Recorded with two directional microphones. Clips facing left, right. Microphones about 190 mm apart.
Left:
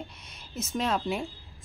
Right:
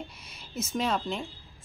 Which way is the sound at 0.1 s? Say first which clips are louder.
Right 1 dB; 5° right (ahead or behind).